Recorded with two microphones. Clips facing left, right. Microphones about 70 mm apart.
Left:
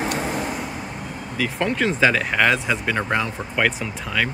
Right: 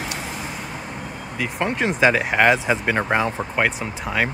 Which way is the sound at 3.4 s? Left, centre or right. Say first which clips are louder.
Even; centre.